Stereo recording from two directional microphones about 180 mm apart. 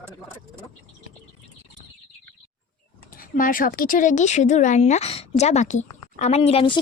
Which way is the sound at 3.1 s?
50° left (ahead or behind).